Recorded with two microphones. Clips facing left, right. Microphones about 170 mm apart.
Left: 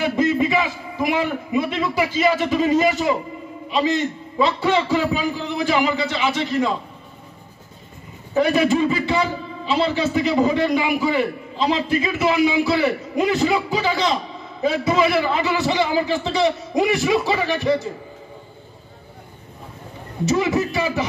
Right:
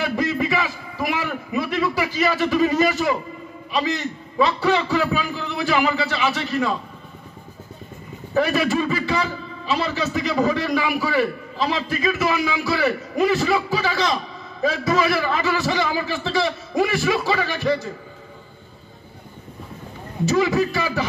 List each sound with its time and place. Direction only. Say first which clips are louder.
0.0 s a man's voice: left 4 dB; 20° left (ahead or behind)
8.4 s a man's voice: left 3 dB; 20° left (ahead or behind)
20.2 s a man's voice: right 1 dB; 20° left (ahead or behind)